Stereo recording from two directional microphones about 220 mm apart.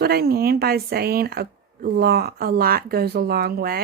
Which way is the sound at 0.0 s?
45° right (ahead or behind).